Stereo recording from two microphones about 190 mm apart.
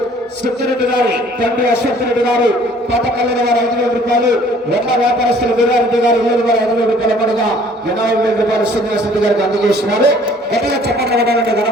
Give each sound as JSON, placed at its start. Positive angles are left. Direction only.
{"t": 10.0, "sound": "speech", "side_deg": -65}